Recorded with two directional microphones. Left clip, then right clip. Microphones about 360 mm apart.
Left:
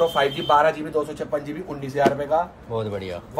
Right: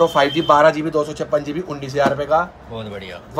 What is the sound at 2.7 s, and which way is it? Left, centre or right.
Speech, centre.